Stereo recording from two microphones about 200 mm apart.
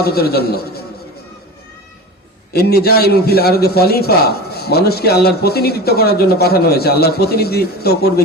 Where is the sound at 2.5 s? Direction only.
50° left (ahead or behind).